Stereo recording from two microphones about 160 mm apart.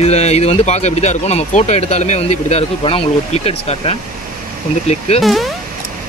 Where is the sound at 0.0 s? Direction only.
40° left (ahead or behind).